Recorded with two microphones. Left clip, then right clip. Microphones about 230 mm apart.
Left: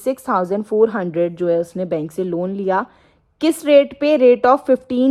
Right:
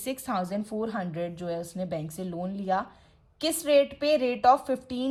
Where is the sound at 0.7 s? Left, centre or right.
Left.